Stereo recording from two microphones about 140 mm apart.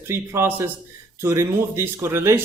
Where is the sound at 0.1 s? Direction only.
15° right (ahead or behind).